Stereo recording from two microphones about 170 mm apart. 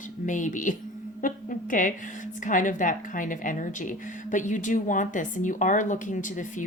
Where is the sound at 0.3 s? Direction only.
50° left (ahead or behind).